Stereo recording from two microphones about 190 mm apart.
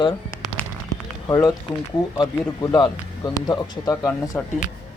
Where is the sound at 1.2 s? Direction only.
20° left (ahead or behind).